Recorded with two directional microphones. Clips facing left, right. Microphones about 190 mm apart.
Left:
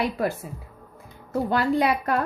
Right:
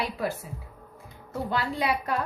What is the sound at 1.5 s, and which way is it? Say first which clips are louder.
Speech: left 6 dB; 55° left (ahead or behind).